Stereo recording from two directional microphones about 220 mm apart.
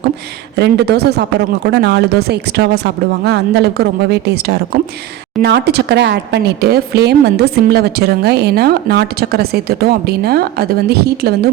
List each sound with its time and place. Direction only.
0.5 s speech: 50° right (ahead or behind)